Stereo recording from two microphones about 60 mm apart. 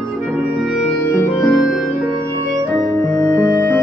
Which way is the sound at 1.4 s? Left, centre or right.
Centre.